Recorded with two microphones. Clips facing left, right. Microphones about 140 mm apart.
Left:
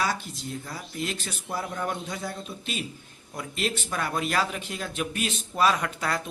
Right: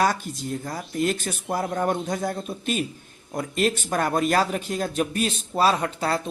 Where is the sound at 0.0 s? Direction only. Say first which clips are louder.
Right 6 dB; 45° right (ahead or behind).